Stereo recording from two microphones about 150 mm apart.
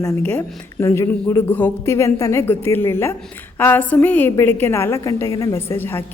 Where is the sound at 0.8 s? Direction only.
15° left (ahead or behind).